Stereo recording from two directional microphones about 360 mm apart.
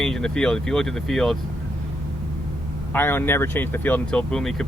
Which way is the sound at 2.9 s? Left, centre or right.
Centre.